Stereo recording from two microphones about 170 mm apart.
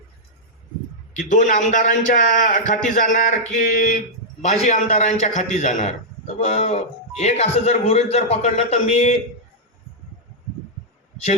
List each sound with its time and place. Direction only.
1.1 s a man's voice: 45° left (ahead or behind)